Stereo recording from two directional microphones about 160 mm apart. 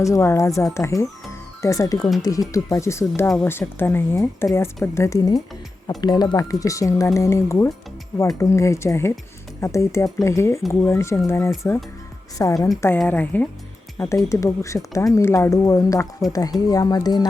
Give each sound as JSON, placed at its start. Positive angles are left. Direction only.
{"t": 0.0, "sound": "speech", "side_deg": 20}